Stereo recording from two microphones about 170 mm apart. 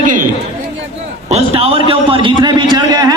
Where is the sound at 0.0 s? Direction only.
50° right (ahead or behind).